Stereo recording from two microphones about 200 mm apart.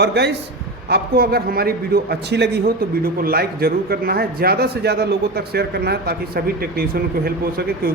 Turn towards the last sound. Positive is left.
turn(degrees=-50)  # may be behind; listen again after turning